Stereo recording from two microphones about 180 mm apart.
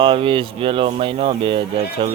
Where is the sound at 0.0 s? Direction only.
30° right (ahead or behind).